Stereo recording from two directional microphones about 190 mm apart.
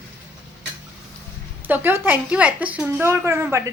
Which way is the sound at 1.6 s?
10° right (ahead or behind).